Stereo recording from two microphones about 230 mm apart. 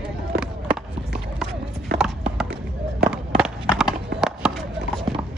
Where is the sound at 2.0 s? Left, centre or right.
Centre.